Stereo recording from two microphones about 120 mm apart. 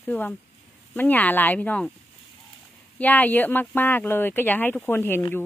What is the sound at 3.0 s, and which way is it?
Speech, 15° left (ahead or behind).